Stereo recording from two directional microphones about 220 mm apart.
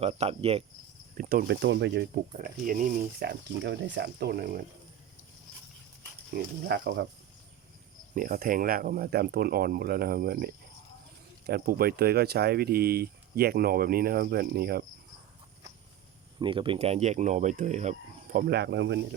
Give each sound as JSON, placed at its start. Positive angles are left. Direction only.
{"t": 0.0, "sound": "cricket", "side_deg": -30}
{"t": 1.1, "sound": "speech", "side_deg": -40}
{"t": 1.5, "sound": "speech", "side_deg": -55}
{"t": 6.3, "sound": "speech", "side_deg": -50}
{"t": 8.1, "sound": "speech", "side_deg": -40}
{"t": 16.4, "sound": "speech", "side_deg": -20}
{"t": 18.3, "sound": "speech", "side_deg": -45}